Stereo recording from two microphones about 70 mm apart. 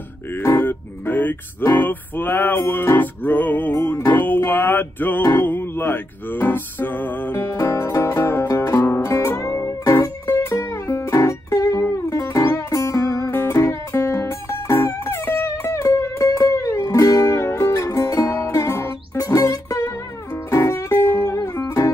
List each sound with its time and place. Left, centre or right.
0.3 s music: left
7.3 s music: left
21.2 s music: left